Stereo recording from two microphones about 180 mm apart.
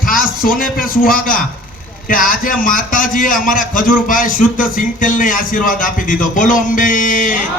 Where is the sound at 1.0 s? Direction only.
50° left (ahead or behind).